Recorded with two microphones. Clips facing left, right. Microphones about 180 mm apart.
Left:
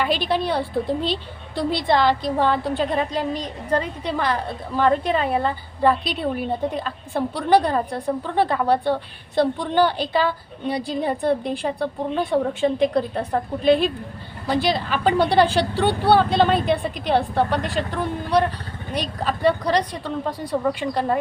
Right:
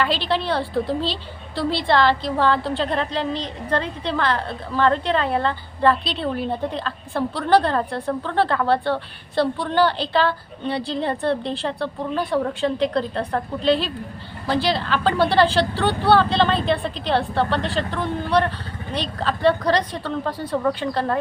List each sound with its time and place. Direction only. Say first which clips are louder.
0.0 s a woman's voice: left 1 dB; 15° left (ahead or behind)